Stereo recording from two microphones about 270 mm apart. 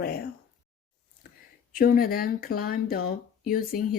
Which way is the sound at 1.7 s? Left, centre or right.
Left.